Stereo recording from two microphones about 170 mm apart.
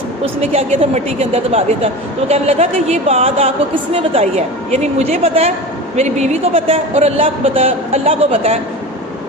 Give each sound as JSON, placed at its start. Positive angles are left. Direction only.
{"t": 0.3, "sound": "speech", "side_deg": -40}